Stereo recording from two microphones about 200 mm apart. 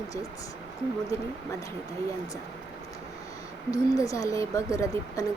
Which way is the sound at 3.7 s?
15° left (ahead or behind).